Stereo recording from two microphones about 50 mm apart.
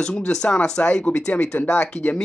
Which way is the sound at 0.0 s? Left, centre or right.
Centre.